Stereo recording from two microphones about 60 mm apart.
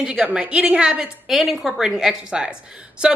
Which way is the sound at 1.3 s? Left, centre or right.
Centre.